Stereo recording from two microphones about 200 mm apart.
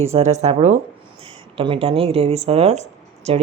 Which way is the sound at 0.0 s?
30° right (ahead or behind).